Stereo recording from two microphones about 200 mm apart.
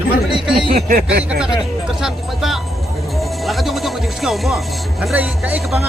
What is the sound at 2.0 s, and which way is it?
Speech, centre (ahead or behind).